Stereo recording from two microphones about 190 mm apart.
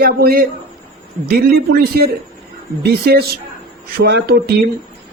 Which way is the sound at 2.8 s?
55° right (ahead or behind).